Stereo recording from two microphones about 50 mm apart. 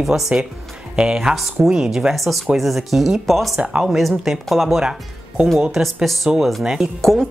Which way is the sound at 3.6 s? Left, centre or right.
Centre.